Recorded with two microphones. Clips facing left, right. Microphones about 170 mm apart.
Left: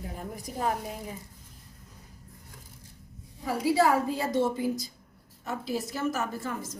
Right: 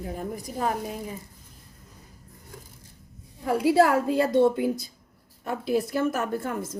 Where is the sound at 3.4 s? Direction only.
60° right (ahead or behind).